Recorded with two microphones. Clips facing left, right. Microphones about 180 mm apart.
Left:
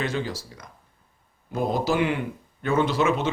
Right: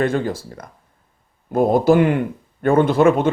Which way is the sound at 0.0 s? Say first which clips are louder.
Right 8 dB; 55° right (ahead or behind).